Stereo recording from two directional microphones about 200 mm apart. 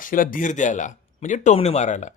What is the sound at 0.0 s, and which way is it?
A man's voice, 45° left (ahead or behind).